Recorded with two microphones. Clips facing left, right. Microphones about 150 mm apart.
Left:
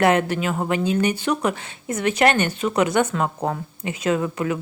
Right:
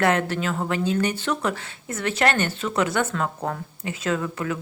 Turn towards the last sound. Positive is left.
turn(degrees=15)  # may be behind; listen again after turning